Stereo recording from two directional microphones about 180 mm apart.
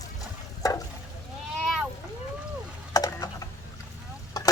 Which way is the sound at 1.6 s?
Centre (ahead or behind).